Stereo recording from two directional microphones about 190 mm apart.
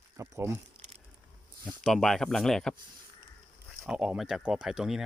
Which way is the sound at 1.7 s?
Centre (ahead or behind).